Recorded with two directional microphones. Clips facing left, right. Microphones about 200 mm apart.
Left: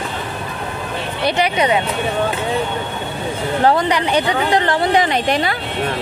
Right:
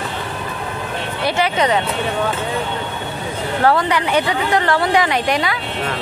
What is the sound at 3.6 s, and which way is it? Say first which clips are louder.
Speech: left 1 dB; 20° left (ahead or behind).